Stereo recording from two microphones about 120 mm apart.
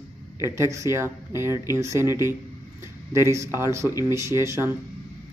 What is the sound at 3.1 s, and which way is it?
A man's voice, 25° right (ahead or behind).